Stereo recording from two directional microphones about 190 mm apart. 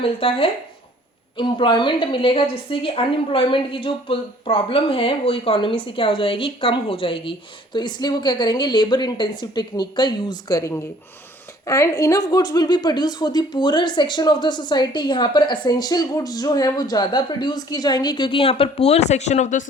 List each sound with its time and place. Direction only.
0.0 s a woman's voice: 30° left (ahead or behind)